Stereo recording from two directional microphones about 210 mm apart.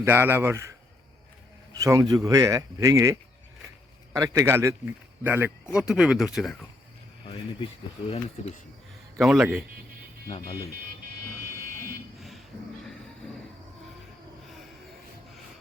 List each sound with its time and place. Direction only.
0.0 s speech: 10° right (ahead or behind)
1.8 s speech: 15° right (ahead or behind); by 6.6 s centre (ahead or behind)
9.1 s speech: centre (ahead or behind)